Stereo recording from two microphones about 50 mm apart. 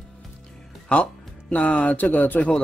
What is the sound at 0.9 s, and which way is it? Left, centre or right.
Speech, left.